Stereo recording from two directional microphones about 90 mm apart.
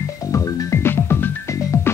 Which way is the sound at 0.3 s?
30° left (ahead or behind).